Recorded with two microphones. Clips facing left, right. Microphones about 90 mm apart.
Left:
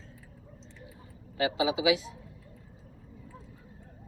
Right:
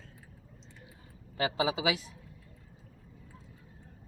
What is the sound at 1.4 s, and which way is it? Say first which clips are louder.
Speech: left 3 dB; 40° right (ahead or behind).